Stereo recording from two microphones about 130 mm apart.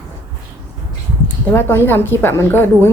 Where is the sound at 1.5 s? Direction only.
15° left (ahead or behind).